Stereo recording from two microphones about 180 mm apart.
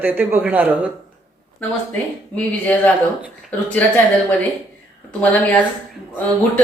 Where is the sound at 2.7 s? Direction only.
5° left (ahead or behind).